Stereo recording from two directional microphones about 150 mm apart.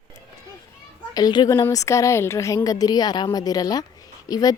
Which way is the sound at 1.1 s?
30° left (ahead or behind).